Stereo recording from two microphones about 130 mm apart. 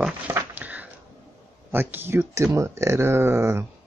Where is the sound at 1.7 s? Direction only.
15° right (ahead or behind).